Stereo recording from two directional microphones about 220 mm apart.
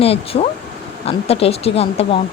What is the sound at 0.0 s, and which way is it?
Speech, 25° left (ahead or behind).